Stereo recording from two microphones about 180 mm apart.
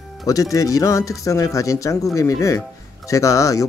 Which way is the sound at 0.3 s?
20° left (ahead or behind).